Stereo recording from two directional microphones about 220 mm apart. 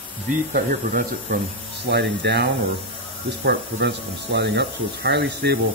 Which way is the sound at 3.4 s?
50° right (ahead or behind).